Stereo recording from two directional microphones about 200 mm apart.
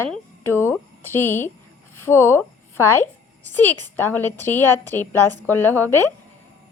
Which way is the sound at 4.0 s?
10° left (ahead or behind).